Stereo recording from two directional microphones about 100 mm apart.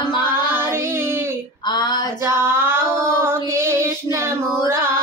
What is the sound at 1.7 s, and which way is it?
Female singing, 45° left (ahead or behind).